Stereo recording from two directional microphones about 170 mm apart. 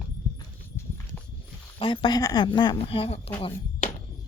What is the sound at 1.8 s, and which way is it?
Speech, 30° left (ahead or behind).